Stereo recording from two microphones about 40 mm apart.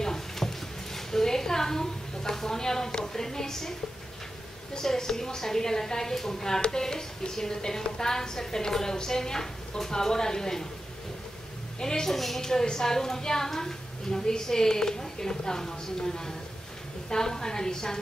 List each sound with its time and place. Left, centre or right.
0.0 s a sound: centre
4.7 s a woman's voice: centre
11.8 s a woman's voice: centre